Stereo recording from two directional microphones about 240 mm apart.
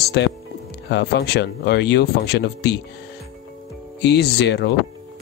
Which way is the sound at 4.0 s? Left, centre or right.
Left.